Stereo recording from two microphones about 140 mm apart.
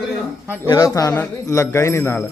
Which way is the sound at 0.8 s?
25° left (ahead or behind).